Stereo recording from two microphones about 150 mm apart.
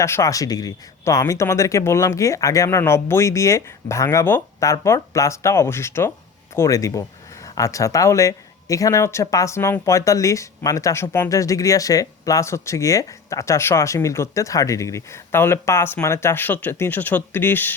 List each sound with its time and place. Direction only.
0.0 s speech: 20° left (ahead or behind)